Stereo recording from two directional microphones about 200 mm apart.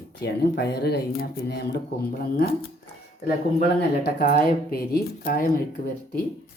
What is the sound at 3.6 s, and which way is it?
Speech, 50° left (ahead or behind).